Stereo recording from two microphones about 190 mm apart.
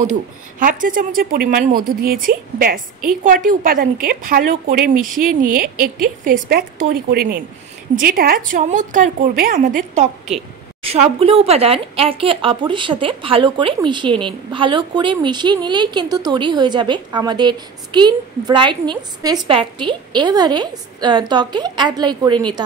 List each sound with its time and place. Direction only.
0.0 s a woman's voice: 40° right (ahead or behind)
6.2 s a woman's voice: 50° right (ahead or behind); by 22.4 s 20° right (ahead or behind)